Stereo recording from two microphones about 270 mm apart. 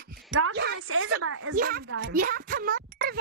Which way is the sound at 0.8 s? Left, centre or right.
Right.